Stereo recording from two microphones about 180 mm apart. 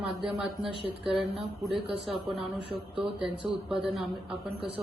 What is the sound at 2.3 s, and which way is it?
Speech, centre (ahead or behind).